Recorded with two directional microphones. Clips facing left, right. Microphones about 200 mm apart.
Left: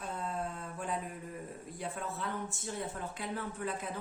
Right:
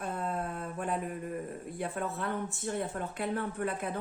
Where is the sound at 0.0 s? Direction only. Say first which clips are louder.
Right 3 dB; 55° right (ahead or behind).